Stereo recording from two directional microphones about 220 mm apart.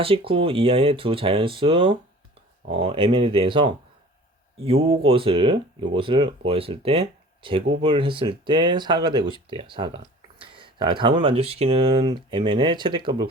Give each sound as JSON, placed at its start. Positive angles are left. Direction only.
{"t": 0.0, "sound": "speech", "side_deg": -25}